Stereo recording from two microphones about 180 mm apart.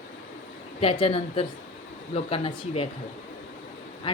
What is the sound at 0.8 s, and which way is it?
Speech, 30° left (ahead or behind).